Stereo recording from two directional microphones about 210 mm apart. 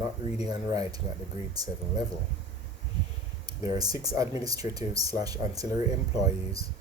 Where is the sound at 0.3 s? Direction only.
30° left (ahead or behind).